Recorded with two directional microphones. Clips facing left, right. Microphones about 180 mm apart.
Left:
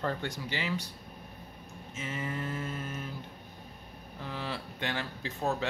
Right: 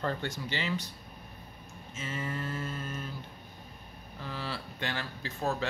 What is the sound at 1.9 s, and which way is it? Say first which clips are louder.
Speech: even; 15° left (ahead or behind).